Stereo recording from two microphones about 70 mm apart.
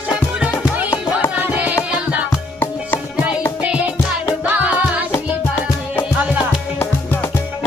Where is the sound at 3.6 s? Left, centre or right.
Centre.